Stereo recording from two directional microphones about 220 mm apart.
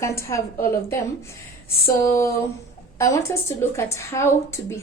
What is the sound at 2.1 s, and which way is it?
Speech, 10° left (ahead or behind).